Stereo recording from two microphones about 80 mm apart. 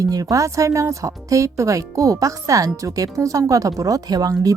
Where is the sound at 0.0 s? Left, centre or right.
Right.